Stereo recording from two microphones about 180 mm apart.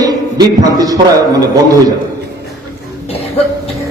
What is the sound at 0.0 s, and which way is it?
Speech, 20° right (ahead or behind).